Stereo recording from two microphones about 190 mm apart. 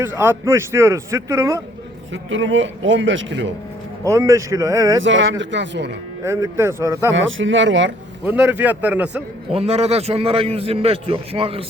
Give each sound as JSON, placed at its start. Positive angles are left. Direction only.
{"t": 0.0, "sound": "a man's voice", "side_deg": -10}
{"t": 2.1, "sound": "a man's voice", "side_deg": -90}
{"t": 4.0, "sound": "a man's voice", "side_deg": -15}
{"t": 5.0, "sound": "speech", "side_deg": -80}
{"t": 6.2, "sound": "a man's voice", "side_deg": -15}
{"t": 7.1, "sound": "a man's voice", "side_deg": -85}
{"t": 8.2, "sound": "a man's voice", "side_deg": -5}
{"t": 9.5, "sound": "a man's voice", "side_deg": -30}